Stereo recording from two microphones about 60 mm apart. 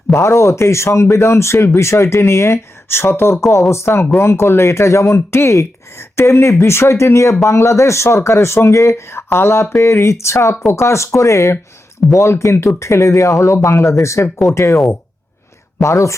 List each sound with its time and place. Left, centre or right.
0.1 s speech: left
15.8 s speech: left